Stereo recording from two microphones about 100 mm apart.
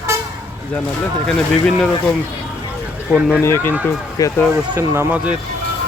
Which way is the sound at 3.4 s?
25° left (ahead or behind).